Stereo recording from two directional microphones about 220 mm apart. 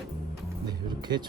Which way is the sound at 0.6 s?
20° right (ahead or behind).